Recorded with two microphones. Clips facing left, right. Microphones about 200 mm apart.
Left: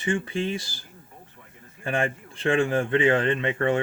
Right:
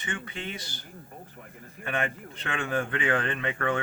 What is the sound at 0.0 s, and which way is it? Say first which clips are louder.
Speech: left 10 dB; 30° left (ahead or behind).